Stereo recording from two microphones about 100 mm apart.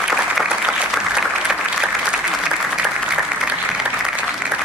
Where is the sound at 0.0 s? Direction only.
5° right (ahead or behind).